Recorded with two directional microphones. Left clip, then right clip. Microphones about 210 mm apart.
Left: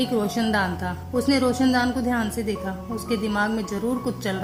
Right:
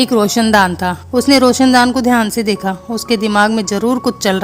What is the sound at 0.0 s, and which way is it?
Speech, 40° right (ahead or behind).